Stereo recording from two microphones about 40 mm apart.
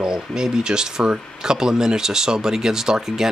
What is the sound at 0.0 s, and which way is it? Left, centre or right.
Speech, centre.